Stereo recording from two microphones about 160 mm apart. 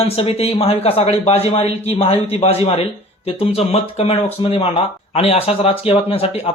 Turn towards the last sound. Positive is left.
turn(degrees=40)  # may be behind; listen again after turning